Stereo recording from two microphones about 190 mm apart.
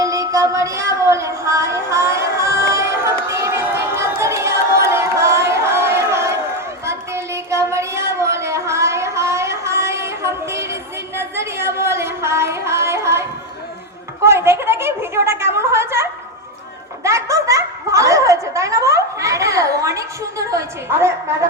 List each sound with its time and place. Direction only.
0.0 s music: 15° right (ahead or behind)
4.2 s a sound: 15° right (ahead or behind)
17.0 s snicker: 15° right (ahead or behind)
20.5 s a woman's voice: 15° right (ahead or behind)